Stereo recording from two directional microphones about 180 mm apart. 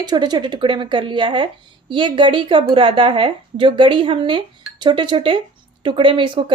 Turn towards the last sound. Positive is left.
turn(degrees=-25)  # may be behind; listen again after turning